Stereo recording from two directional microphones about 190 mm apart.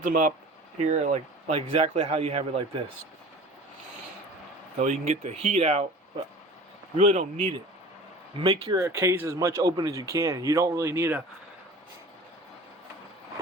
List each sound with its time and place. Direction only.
0.0 s a man's voice: 45° right (ahead or behind)
4.8 s a man's voice: 35° right (ahead or behind)
6.9 s a man's voice: 35° right (ahead or behind)
8.6 s speech: 15° right (ahead or behind)